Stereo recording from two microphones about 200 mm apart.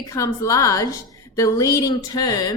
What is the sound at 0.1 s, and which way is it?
A woman's voice, 15° left (ahead or behind).